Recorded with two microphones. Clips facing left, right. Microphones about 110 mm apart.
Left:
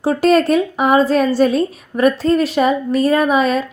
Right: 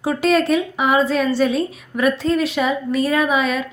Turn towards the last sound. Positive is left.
turn(degrees=40)  # may be behind; listen again after turning